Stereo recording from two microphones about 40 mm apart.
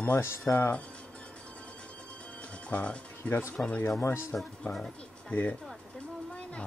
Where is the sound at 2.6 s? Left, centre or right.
Left.